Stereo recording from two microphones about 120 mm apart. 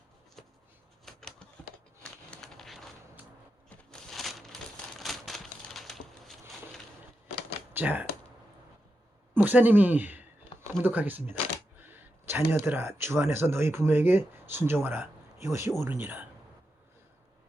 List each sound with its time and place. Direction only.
1.0 s a sound: 5° left (ahead or behind)
3.7 s crumpling: 5° left (ahead or behind)
7.7 s speech: 15° right (ahead or behind)
9.3 s speech: 15° right (ahead or behind)